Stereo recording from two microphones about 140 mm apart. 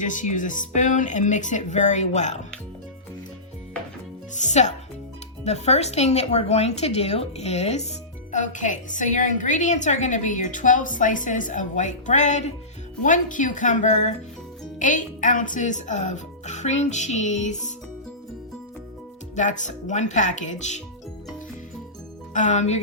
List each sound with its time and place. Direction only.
0.0 s a woman's voice: 65° left (ahead or behind)
4.4 s a woman's voice: 55° left (ahead or behind)
8.3 s a woman's voice: 60° left (ahead or behind)
19.4 s a woman's voice: 60° left (ahead or behind)
22.3 s speech: 60° left (ahead or behind)